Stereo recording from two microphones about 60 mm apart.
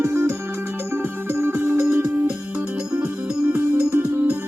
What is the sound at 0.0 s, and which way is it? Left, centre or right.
Music, right.